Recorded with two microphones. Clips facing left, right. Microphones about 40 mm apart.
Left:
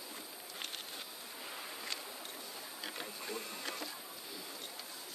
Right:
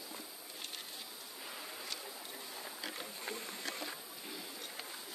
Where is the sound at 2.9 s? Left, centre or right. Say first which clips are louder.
Left 1 dB; left.